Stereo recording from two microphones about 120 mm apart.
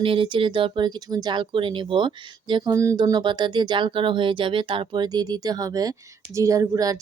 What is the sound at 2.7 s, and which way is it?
Speech, 25° right (ahead or behind).